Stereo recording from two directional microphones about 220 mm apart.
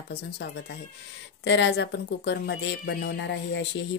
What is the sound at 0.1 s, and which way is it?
Speech, 50° left (ahead or behind).